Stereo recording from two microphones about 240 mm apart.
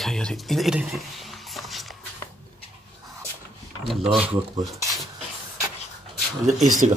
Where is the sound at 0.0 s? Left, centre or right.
Centre.